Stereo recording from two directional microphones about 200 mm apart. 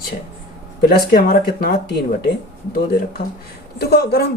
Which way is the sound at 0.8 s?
45° left (ahead or behind).